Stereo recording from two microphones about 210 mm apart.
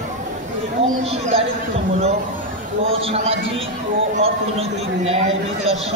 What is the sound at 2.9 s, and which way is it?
A man's voice, 25° right (ahead or behind).